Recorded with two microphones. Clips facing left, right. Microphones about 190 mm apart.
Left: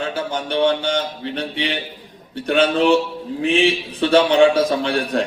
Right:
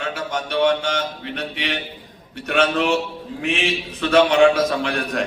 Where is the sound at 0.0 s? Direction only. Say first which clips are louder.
Left 2 dB; 30° left (ahead or behind).